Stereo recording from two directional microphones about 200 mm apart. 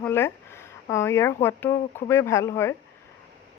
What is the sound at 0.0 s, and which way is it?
Speech, 10° left (ahead or behind).